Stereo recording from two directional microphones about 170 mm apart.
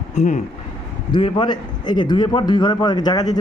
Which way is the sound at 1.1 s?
30° left (ahead or behind).